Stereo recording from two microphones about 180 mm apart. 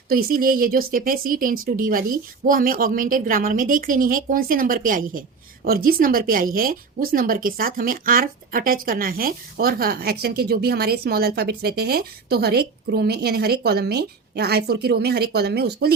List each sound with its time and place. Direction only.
0.1 s a woman's voice: 55° right (ahead or behind)